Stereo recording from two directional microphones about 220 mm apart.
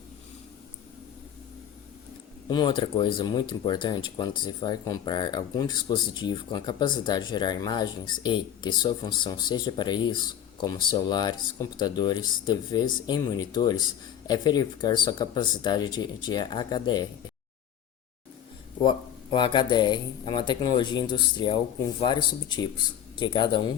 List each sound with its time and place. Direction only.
2.5 s speech: 20° left (ahead or behind)
18.9 s speech: 20° left (ahead or behind)